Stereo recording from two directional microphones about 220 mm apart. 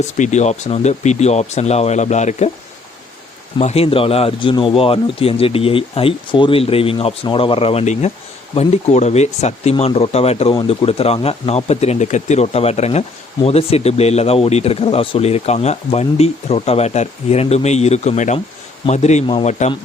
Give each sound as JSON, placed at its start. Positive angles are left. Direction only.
{"t": 0.2, "sound": "speech", "side_deg": 30}
{"t": 3.6, "sound": "speech", "side_deg": 30}